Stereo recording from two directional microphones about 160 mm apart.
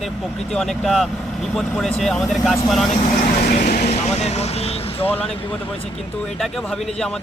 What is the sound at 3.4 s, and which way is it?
Speech, 60° left (ahead or behind).